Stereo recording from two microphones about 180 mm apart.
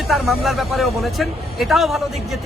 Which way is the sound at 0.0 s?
Centre (ahead or behind).